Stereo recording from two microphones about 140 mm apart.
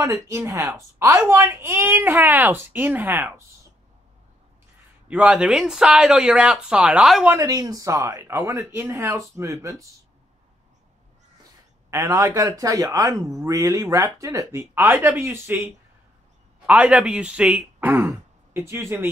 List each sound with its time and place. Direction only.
0.0 s a woman's voice: 20° right (ahead or behind)
5.0 s a woman's voice: 10° right (ahead or behind)
7.2 s speech: 25° right (ahead or behind)
11.9 s speech: 25° right (ahead or behind)